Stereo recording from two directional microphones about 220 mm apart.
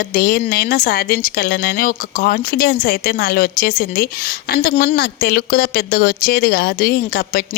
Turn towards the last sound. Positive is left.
turn(degrees=45)  # may be behind; listen again after turning